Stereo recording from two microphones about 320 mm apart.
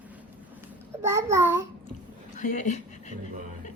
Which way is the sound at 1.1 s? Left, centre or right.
Centre.